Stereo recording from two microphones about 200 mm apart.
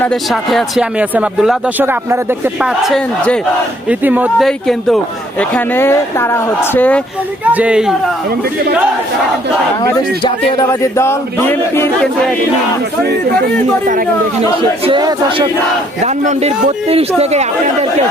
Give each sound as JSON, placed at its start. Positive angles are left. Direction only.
{"t": 0.0, "sound": "a man's voice", "side_deg": 0}
{"t": 7.4, "sound": "speech", "side_deg": -5}
{"t": 9.8, "sound": "a man's voice", "side_deg": 20}
{"t": 13.1, "sound": "speech", "side_deg": -45}
{"t": 14.8, "sound": "a man's voice", "side_deg": -25}
{"t": 16.0, "sound": "a man's voice", "side_deg": -35}